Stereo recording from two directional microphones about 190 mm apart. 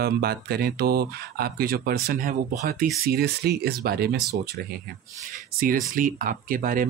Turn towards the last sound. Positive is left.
turn(degrees=-50)  # may be behind; listen again after turning